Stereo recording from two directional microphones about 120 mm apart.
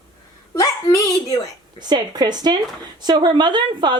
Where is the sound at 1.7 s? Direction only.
35° right (ahead or behind).